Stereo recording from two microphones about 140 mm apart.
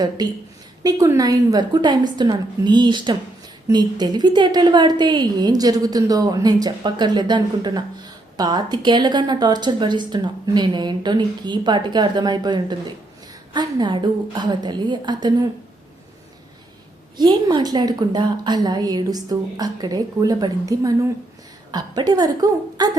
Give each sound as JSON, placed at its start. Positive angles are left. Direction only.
{"t": 0.8, "sound": "a woman's voice", "side_deg": -25}
{"t": 17.2, "sound": "a woman's voice", "side_deg": -30}